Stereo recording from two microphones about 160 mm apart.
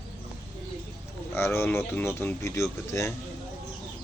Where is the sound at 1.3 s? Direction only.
15° left (ahead or behind).